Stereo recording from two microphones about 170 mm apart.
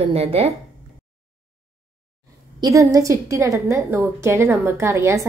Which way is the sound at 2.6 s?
20° right (ahead or behind).